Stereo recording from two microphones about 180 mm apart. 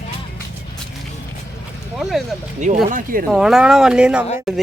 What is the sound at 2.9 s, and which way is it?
Speech, 50° right (ahead or behind).